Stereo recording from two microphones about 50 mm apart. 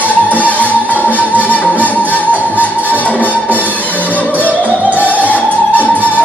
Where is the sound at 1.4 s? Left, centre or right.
Left.